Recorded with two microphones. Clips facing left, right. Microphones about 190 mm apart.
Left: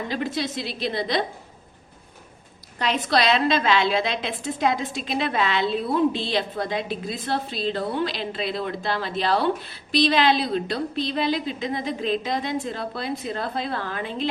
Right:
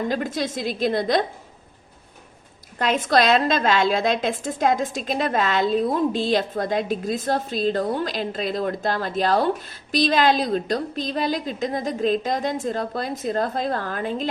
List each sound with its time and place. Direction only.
0.1 s a woman's voice: 45° right (ahead or behind)
2.7 s a woman's voice: 45° right (ahead or behind)